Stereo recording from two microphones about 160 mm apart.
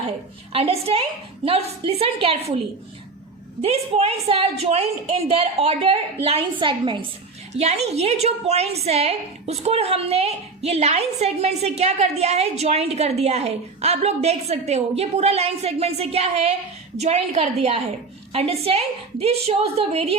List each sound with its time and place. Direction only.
0.5 s a woman's voice: 40° right (ahead or behind)
3.6 s a woman's voice: 40° right (ahead or behind)
7.5 s a woman's voice: 45° right (ahead or behind)